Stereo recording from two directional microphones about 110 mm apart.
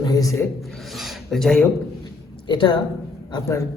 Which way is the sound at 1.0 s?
Centre (ahead or behind).